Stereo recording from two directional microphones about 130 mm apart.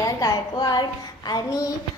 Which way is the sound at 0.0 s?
30° left (ahead or behind).